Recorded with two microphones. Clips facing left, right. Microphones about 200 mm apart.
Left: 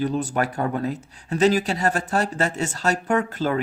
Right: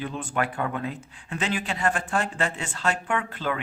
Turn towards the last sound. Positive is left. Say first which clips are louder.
# left 6 dB
turn(degrees=40)  # may be behind; listen again after turning